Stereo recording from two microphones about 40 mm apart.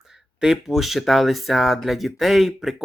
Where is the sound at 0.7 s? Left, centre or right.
Centre.